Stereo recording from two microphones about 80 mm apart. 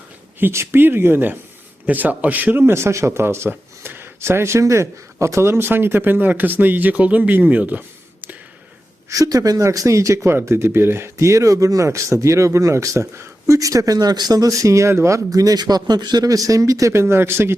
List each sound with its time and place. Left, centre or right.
0.3 s speech: right
9.0 s speech: right